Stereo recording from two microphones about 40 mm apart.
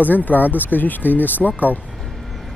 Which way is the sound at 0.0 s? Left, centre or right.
Left.